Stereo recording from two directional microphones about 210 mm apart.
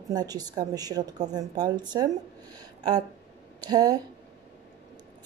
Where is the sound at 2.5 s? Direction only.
20° right (ahead or behind).